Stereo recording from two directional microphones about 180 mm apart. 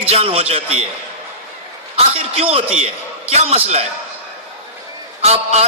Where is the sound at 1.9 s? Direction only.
30° right (ahead or behind).